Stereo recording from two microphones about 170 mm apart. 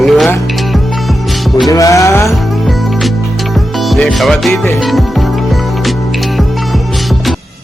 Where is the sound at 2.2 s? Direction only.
Centre (ahead or behind).